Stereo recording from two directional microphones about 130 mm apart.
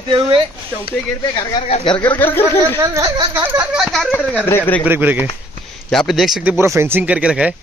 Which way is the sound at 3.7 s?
Centre (ahead or behind).